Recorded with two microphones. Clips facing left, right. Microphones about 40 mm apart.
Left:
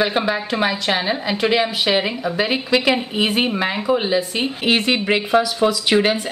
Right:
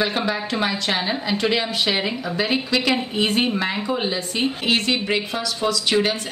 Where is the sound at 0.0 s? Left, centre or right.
Centre.